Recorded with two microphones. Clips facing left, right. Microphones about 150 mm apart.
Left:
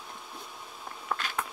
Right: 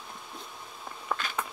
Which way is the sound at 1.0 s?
Centre (ahead or behind).